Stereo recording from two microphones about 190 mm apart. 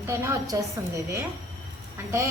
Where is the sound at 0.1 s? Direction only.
15° right (ahead or behind).